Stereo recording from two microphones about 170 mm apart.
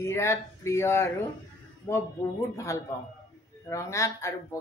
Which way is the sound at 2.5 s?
20° left (ahead or behind).